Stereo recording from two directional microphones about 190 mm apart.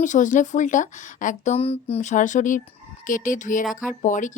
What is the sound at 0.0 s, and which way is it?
A woman's voice, 40° left (ahead or behind).